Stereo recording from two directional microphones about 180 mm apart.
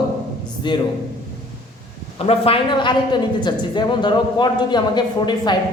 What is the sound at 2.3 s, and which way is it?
Speech, 30° left (ahead or behind).